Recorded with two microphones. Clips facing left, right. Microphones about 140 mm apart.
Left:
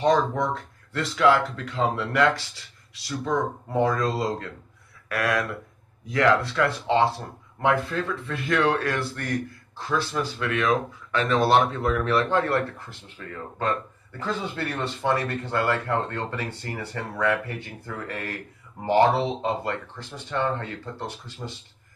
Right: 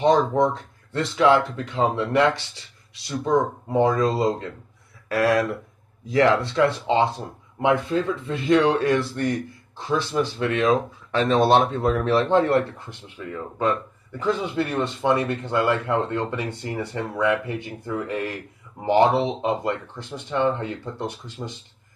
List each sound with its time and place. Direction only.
0.0 s speech: 25° right (ahead or behind)
18.9 s speech: 15° right (ahead or behind)